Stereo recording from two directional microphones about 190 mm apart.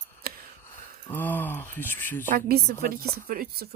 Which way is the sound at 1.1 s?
10° left (ahead or behind).